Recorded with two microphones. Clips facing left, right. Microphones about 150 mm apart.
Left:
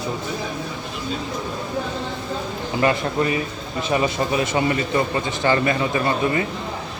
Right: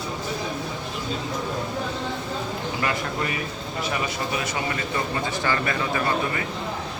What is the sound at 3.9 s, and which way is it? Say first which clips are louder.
A man's voice: left 9 dB; 25° left (ahead or behind).